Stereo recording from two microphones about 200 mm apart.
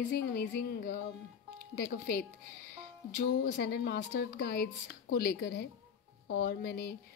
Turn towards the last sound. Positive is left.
turn(degrees=50)  # may be behind; listen again after turning